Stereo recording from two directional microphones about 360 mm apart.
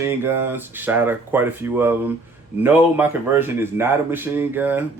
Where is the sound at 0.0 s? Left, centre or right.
Centre.